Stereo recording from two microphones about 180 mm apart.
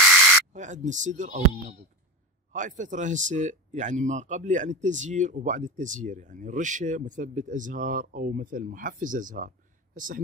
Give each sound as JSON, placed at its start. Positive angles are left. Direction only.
{"t": 0.5, "sound": "speech", "side_deg": -45}